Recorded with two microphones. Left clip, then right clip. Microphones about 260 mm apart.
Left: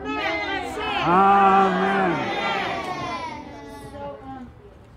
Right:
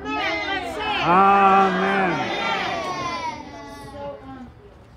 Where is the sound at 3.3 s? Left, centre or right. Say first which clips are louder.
Right 3 dB; right.